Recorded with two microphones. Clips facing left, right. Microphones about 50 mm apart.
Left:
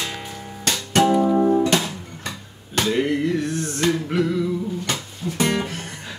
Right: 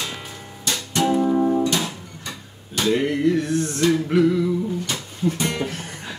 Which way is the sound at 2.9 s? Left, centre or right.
Centre.